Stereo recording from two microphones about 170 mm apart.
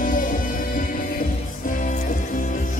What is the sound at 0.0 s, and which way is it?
Music, 50° left (ahead or behind).